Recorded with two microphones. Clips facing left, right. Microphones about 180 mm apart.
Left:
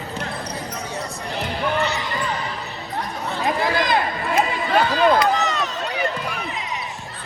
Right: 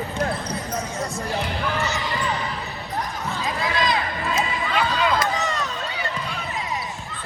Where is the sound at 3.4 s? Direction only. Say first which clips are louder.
Left 4 dB; 60° left (ahead or behind).